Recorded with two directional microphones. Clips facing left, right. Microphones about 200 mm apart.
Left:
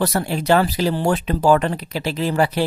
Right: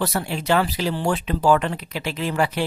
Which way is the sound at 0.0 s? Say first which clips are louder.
Left 4 dB; 40° left (ahead or behind).